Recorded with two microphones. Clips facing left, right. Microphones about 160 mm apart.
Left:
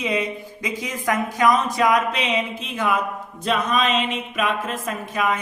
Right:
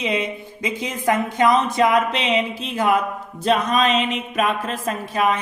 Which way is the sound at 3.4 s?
35° right (ahead or behind).